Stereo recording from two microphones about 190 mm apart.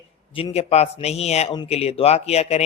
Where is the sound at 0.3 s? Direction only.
30° left (ahead or behind).